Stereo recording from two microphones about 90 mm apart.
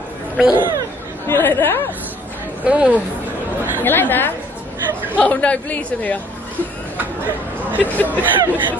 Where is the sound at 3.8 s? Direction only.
20° left (ahead or behind).